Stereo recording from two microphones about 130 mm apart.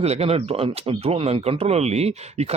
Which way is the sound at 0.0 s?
55° right (ahead or behind).